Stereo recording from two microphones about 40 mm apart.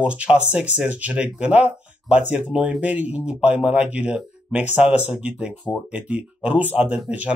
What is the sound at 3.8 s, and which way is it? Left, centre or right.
Speech, right.